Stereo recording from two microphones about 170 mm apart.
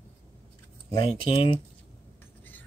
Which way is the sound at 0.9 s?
30° left (ahead or behind).